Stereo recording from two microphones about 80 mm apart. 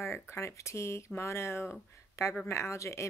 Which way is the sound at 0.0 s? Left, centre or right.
Left.